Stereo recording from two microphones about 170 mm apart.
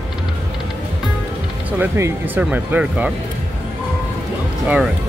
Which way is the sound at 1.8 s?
10° right (ahead or behind).